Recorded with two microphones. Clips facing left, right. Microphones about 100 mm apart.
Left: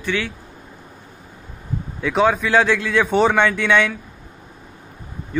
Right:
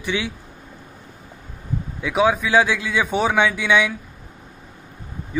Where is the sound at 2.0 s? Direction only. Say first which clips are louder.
Left 1 dB; 5° right (ahead or behind).